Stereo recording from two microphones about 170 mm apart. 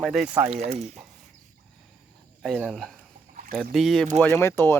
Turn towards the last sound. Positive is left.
turn(degrees=15)  # may be behind; listen again after turning